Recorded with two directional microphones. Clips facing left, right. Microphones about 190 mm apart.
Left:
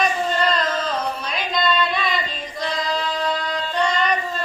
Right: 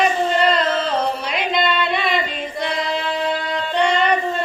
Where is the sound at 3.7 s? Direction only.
25° right (ahead or behind).